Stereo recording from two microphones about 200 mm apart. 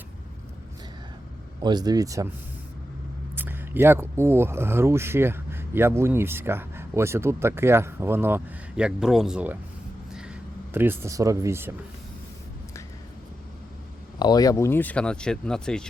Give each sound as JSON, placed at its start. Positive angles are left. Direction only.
{"t": 1.6, "sound": "speech", "side_deg": -20}
{"t": 3.3, "sound": "speech", "side_deg": -10}
{"t": 10.1, "sound": "a sound", "side_deg": -5}
{"t": 14.2, "sound": "speech", "side_deg": 20}